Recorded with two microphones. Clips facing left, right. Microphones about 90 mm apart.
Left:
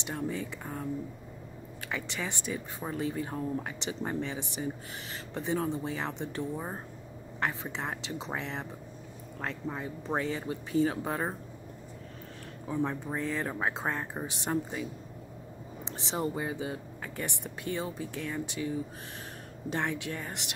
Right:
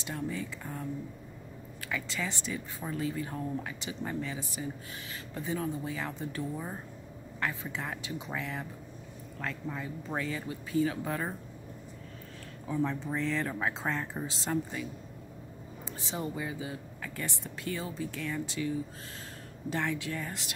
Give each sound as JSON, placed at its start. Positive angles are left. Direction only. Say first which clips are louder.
{"t": 0.1, "sound": "speech", "louder": "left 1 dB", "side_deg": 20}
{"t": 1.8, "sound": "speech", "louder": "even", "side_deg": 30}
{"t": 12.6, "sound": "speech", "louder": "even", "side_deg": 15}
{"t": 16.2, "sound": "speech", "louder": "left 4 dB", "side_deg": 35}
{"t": 19.7, "sound": "speech", "louder": "even", "side_deg": 20}